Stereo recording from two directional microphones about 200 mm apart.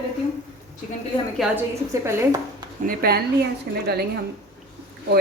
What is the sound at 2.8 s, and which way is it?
Speech, 50° right (ahead or behind).